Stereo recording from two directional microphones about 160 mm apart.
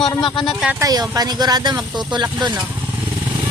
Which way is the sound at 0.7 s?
25° right (ahead or behind).